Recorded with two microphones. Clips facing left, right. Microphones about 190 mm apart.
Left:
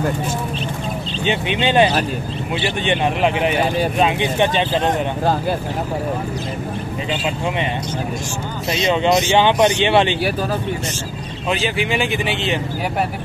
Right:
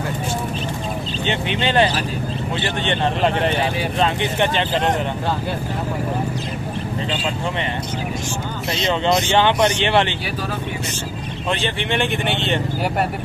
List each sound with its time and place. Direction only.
1.2 s speech: 15° left (ahead or behind)
8.7 s speech: 15° left (ahead or behind)
11.6 s speech: 5° left (ahead or behind)